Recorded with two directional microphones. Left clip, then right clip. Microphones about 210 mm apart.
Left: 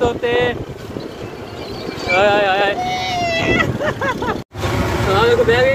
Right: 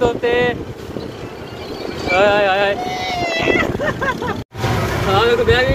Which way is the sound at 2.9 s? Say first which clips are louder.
Left 1 dB; 10° left (ahead or behind).